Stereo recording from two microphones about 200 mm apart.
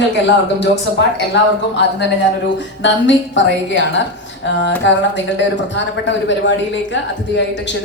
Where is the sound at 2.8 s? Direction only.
65° left (ahead or behind).